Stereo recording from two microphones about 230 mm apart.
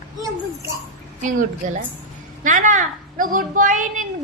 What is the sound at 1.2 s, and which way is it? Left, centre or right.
A woman's voice, right.